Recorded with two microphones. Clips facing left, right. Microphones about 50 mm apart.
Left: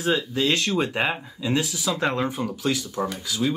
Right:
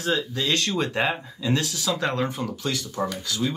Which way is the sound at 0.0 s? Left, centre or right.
Centre.